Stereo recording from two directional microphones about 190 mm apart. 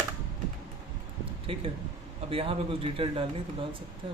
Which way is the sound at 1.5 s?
30° right (ahead or behind).